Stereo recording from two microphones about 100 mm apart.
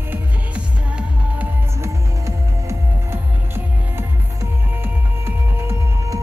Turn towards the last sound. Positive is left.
turn(degrees=-25)  # may be behind; listen again after turning